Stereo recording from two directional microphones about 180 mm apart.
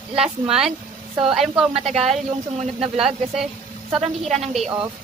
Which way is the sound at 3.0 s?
5° right (ahead or behind).